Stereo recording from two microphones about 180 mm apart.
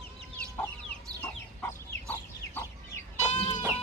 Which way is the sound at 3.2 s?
40° left (ahead or behind).